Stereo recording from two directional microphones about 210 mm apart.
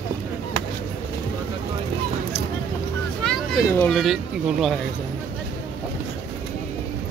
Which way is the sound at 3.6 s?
10° left (ahead or behind).